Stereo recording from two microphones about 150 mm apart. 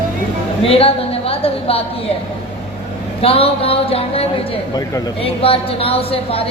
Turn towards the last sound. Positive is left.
turn(degrees=40)  # may be behind; listen again after turning